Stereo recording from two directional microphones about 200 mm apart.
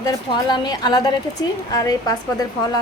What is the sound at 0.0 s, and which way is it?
A woman's voice, 20° left (ahead or behind).